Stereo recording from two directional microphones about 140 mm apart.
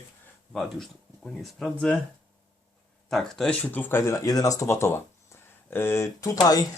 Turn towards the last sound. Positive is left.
turn(degrees=25)  # may be behind; listen again after turning